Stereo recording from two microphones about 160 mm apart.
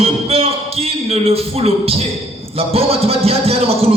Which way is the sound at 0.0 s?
40° right (ahead or behind).